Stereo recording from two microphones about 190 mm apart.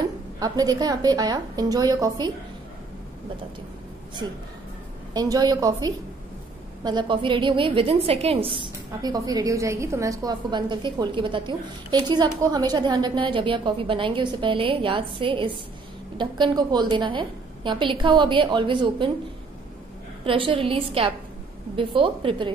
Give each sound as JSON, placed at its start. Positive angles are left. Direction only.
{"t": 0.0, "sound": "a woman's voice", "side_deg": -20}
{"t": 5.1, "sound": "a woman's voice", "side_deg": -20}
{"t": 20.2, "sound": "a woman's voice", "side_deg": -30}